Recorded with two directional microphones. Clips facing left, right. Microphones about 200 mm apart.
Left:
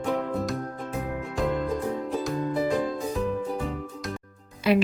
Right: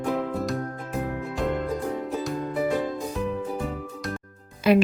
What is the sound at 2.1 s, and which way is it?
Music, 5° right (ahead or behind).